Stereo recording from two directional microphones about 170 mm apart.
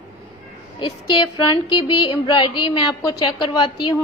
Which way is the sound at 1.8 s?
30° left (ahead or behind).